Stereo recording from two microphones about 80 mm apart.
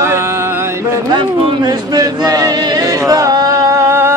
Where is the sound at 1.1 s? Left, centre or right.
Right.